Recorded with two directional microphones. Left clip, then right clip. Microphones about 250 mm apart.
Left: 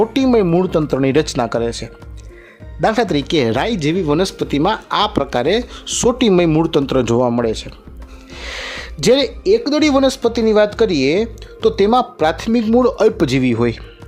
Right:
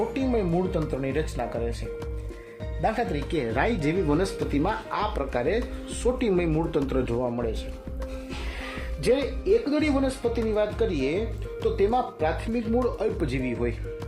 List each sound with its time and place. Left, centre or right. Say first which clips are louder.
0.1 s speech: left 12 dB; left
2.8 s speech: left 11 dB; left